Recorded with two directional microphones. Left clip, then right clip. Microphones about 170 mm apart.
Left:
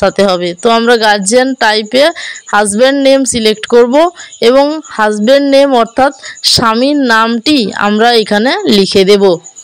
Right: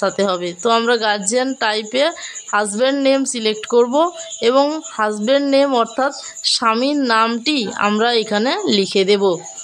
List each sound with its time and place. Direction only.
0.0 s speech: 35° left (ahead or behind)